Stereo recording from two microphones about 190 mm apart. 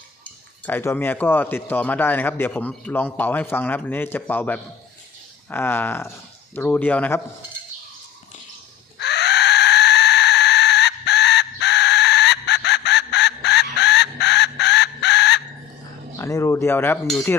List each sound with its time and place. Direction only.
0.6 s speech: 10° left (ahead or behind)
9.0 s a sound: 65° left (ahead or behind)
16.1 s cutlery: 15° left (ahead or behind)